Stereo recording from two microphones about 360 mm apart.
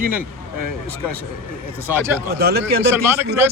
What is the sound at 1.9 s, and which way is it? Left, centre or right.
Speech, centre.